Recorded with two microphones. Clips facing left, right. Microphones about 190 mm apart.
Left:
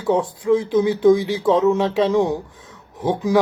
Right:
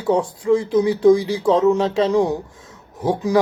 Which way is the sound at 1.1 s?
20° left (ahead or behind).